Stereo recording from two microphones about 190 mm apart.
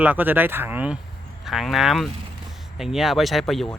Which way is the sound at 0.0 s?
10° right (ahead or behind).